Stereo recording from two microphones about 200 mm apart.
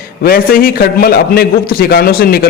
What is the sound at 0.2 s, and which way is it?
A man's voice, 50° left (ahead or behind).